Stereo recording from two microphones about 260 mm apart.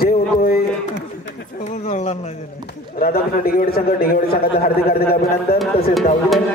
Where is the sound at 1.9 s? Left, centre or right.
Left.